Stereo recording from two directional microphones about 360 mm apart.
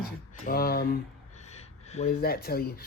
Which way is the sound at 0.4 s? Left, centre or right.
Left.